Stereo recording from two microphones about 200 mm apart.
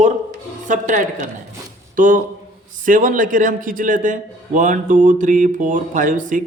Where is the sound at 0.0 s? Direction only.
40° right (ahead or behind).